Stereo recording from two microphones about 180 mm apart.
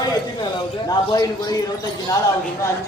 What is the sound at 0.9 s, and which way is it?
Speech, 20° left (ahead or behind).